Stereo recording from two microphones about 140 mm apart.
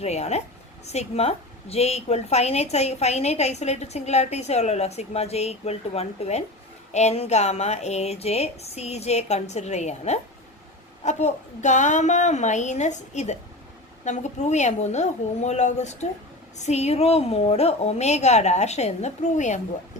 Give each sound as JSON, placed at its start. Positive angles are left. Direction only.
{"t": 0.0, "sound": "a woman's voice", "side_deg": 50}